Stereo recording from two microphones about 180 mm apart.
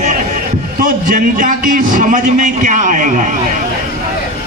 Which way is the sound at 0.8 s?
50° right (ahead or behind).